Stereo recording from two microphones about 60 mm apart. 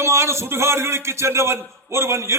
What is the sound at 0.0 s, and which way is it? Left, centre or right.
A man's voice, right.